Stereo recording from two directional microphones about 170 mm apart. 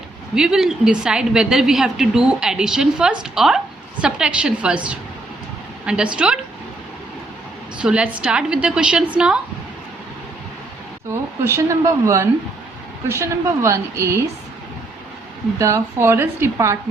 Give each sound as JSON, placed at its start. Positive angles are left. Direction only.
{"t": 0.3, "sound": "a woman's voice", "side_deg": -5}
{"t": 7.8, "sound": "a woman's voice", "side_deg": -5}
{"t": 11.1, "sound": "speech", "side_deg": -15}
{"t": 15.5, "sound": "speech", "side_deg": -20}